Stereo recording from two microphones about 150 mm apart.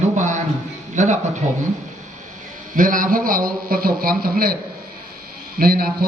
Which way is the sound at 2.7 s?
65° right (ahead or behind).